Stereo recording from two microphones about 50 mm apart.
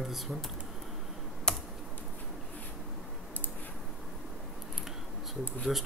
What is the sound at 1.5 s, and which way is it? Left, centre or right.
Computer keyboard, centre.